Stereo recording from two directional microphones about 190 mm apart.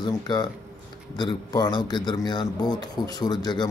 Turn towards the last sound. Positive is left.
turn(degrees=20)  # may be behind; listen again after turning